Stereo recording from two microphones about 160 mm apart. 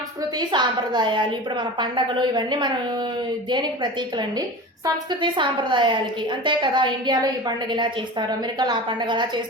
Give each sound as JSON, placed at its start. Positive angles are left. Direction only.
{"t": 0.5, "sound": "a woman's voice", "side_deg": -30}
{"t": 5.2, "sound": "a woman's voice", "side_deg": -30}
{"t": 8.5, "sound": "a woman's voice", "side_deg": -30}